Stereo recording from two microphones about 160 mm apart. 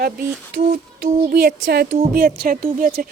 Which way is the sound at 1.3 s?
75° right (ahead or behind).